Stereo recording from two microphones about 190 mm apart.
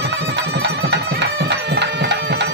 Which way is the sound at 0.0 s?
65° right (ahead or behind).